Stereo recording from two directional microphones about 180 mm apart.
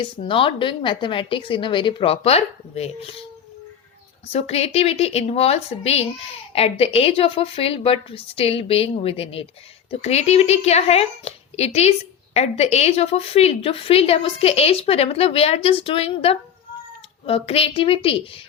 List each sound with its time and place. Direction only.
0.0 s a woman's voice: 30° left (ahead or behind)
4.3 s a woman's voice: 35° left (ahead or behind)